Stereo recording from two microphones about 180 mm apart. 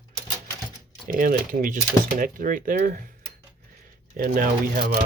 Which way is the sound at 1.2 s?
50° right (ahead or behind).